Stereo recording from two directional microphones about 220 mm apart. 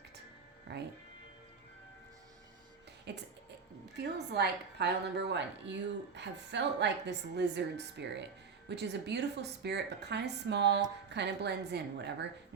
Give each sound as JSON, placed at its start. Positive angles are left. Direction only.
{"t": 0.7, "sound": "speech", "side_deg": -55}
{"t": 3.1, "sound": "a woman's voice", "side_deg": -50}